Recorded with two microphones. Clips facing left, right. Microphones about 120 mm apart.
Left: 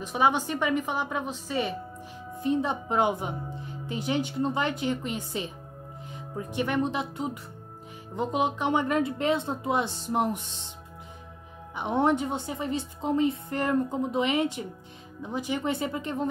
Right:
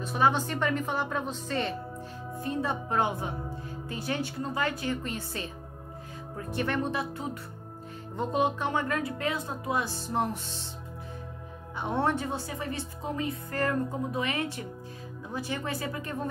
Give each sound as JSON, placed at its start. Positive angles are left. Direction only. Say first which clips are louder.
{"t": 0.0, "sound": "a woman's voice", "louder": "left 1 dB", "side_deg": 15}
{"t": 11.7, "sound": "speech", "louder": "left 4 dB", "side_deg": 15}